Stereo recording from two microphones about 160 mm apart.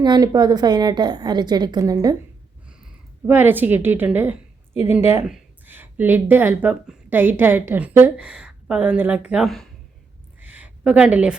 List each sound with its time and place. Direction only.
0.0 s a woman's voice: 25° right (ahead or behind)
2.6 s a woman's voice: 10° right (ahead or behind)
10.4 s a sound: 10° right (ahead or behind)